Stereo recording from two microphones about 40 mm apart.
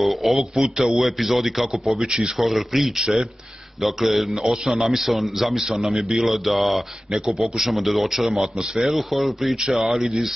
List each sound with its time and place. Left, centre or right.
0.0 s a man's voice: centre
2.0 s speech: right
2.3 s a man's voice: centre
9.6 s a man's voice: centre